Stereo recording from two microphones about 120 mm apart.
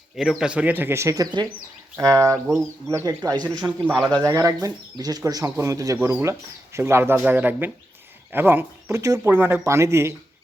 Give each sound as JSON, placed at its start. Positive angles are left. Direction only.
{"t": 0.2, "sound": "speech", "side_deg": -5}